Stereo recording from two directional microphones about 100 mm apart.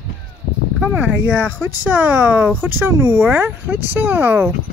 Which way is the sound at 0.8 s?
15° right (ahead or behind).